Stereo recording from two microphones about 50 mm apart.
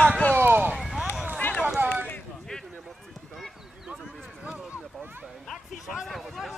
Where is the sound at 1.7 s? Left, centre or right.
Centre.